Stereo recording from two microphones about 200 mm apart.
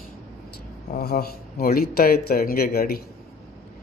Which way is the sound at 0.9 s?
50° left (ahead or behind).